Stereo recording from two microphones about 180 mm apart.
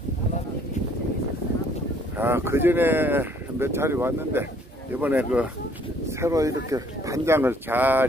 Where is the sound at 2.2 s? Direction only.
15° right (ahead or behind).